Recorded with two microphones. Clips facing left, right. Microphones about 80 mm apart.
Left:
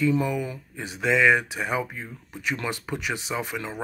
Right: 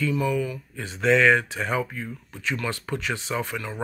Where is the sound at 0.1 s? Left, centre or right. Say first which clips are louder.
Even; left.